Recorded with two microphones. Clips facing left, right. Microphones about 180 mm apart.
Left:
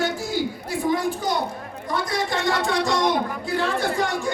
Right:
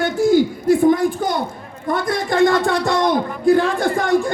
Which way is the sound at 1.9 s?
55° right (ahead or behind).